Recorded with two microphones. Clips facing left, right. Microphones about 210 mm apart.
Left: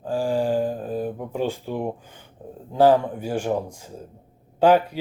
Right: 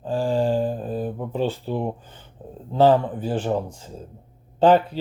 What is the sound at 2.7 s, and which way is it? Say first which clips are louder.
Speech: even; 10° left (ahead or behind).